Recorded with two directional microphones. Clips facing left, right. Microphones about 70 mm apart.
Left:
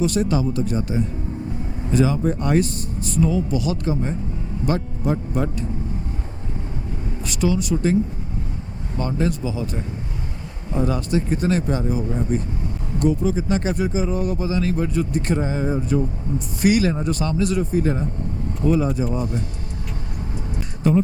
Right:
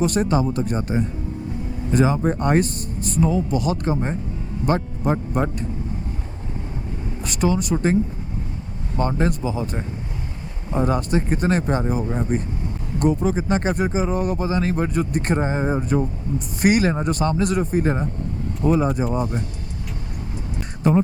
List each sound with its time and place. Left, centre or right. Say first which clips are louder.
0.0 s speech: right 1 dB; right
7.3 s speech: even; right
9.0 s speech: right 1 dB; right